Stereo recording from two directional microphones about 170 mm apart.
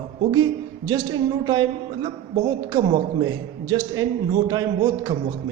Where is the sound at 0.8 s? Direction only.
25° right (ahead or behind).